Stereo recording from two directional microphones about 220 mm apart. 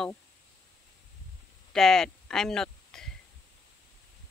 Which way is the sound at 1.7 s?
Centre (ahead or behind).